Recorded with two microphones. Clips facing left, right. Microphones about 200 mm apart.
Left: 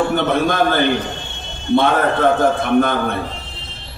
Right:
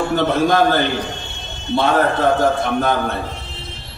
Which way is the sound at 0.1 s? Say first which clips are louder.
Right 1 dB; 55° left (ahead or behind).